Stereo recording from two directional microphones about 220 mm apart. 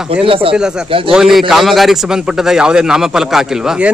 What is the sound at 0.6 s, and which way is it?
Speech, 5° right (ahead or behind).